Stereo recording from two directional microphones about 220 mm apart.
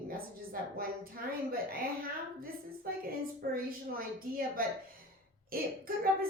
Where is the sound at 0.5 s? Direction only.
40° right (ahead or behind).